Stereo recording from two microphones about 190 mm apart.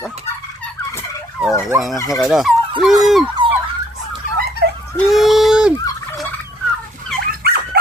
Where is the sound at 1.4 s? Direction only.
5° right (ahead or behind).